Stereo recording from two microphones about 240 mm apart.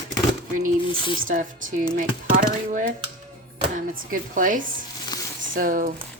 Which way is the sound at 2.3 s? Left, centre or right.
Right.